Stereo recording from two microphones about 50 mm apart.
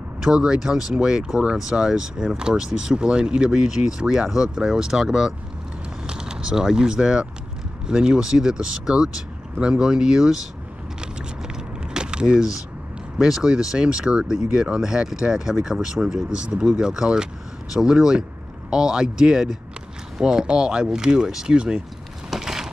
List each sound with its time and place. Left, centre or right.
0.2 s speech: centre
11.0 s vehicle: centre
13.2 s speech: centre
16.3 s speech: centre
22.3 s a sound: centre